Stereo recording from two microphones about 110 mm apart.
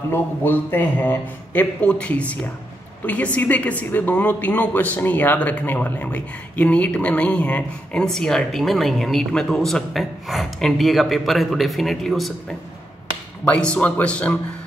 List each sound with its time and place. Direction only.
0.1 s speech: 20° left (ahead or behind)
3.3 s speech: 15° left (ahead or behind)